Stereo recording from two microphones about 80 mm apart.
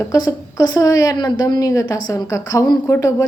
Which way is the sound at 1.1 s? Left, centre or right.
Left.